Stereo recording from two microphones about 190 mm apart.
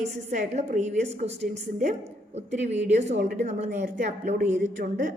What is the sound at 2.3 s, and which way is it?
A woman's voice, 35° right (ahead or behind).